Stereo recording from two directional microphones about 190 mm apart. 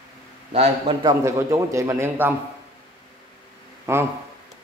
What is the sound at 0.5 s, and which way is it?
Speech, 30° right (ahead or behind).